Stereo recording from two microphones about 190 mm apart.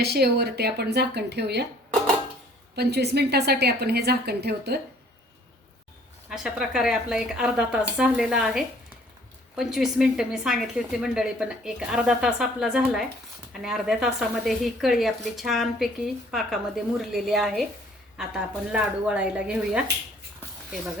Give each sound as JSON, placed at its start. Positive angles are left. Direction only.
{"t": 0.0, "sound": "a woman's voice", "side_deg": -60}
{"t": 2.7, "sound": "a woman's voice", "side_deg": -60}
{"t": 6.3, "sound": "a woman's voice", "side_deg": -5}